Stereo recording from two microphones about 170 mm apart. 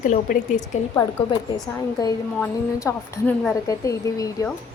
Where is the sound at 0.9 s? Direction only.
20° left (ahead or behind).